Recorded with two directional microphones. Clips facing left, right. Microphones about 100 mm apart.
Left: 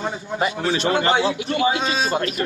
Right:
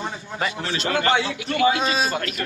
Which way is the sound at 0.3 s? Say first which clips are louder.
Left 5 dB; 25° left (ahead or behind).